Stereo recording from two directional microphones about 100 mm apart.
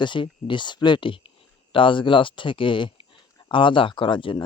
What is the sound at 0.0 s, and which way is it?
Speech, 55° left (ahead or behind).